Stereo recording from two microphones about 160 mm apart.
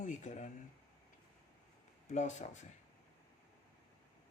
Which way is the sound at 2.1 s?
45° left (ahead or behind).